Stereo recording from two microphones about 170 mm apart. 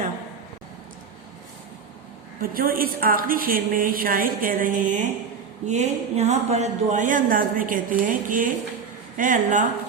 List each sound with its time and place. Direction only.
2.4 s a woman's voice: 60° right (ahead or behind)